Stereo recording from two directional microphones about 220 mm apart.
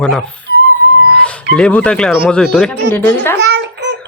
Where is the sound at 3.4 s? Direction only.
50° right (ahead or behind).